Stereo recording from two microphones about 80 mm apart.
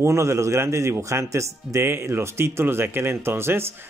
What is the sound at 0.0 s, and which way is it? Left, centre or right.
Speech, right.